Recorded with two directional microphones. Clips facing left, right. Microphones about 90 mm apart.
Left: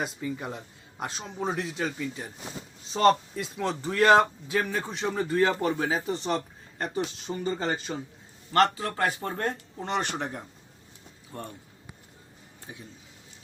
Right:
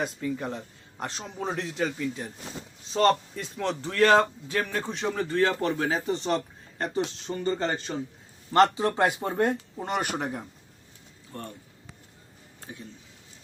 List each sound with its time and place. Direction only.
0.0 s a man's voice: 5° left (ahead or behind)
8.5 s speech: 20° right (ahead or behind)
11.3 s speech: 15° left (ahead or behind)